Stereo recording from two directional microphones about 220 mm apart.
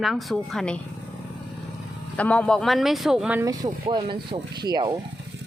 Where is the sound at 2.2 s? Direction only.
5° left (ahead or behind); by 5.0 s 20° right (ahead or behind).